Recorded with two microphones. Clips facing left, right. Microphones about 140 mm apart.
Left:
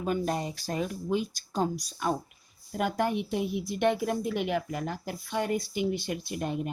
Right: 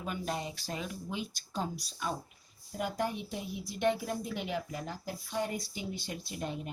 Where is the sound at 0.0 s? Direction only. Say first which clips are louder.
Left 7 dB; 45° left (ahead or behind).